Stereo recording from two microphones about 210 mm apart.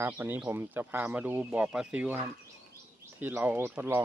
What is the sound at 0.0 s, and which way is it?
Speech, 10° right (ahead or behind).